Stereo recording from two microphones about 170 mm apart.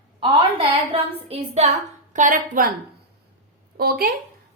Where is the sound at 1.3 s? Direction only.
40° right (ahead or behind).